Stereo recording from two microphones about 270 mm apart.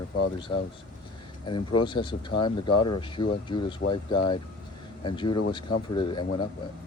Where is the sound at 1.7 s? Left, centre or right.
Centre.